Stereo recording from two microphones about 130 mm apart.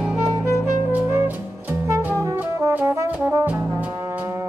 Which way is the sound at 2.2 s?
25° right (ahead or behind).